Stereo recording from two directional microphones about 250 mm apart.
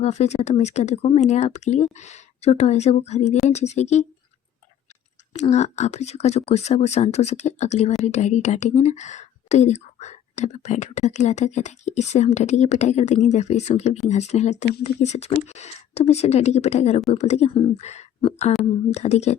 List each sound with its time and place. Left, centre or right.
0.0 s speech: left
5.3 s speech: left